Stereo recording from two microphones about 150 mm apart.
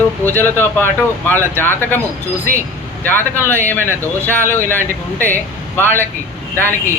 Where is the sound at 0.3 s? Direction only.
15° left (ahead or behind).